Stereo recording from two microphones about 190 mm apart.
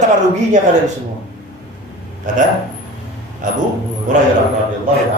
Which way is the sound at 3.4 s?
40° right (ahead or behind).